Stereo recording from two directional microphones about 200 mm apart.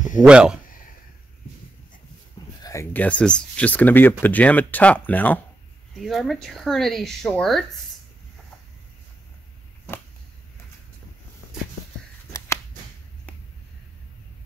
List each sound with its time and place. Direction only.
0.2 s speech: 5° right (ahead or behind)
2.6 s speech: 15° left (ahead or behind)
12.3 s a sound: 15° left (ahead or behind)